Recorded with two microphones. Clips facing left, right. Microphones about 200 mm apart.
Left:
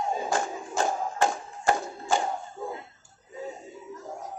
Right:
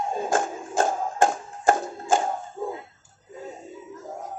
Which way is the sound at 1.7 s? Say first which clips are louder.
Right 4 dB; 50° right (ahead or behind).